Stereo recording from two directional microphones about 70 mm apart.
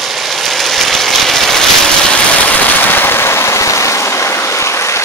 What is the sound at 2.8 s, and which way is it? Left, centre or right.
Vehicle, left.